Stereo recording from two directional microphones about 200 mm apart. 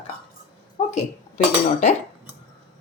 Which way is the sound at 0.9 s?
35° left (ahead or behind).